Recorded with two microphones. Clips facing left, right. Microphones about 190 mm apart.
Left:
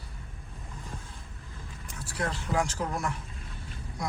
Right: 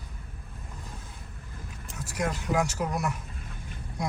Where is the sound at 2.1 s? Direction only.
10° right (ahead or behind).